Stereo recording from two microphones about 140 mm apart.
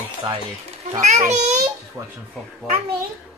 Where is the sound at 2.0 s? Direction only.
25° right (ahead or behind).